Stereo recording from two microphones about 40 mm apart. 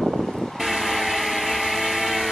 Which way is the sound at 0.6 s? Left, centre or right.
Centre.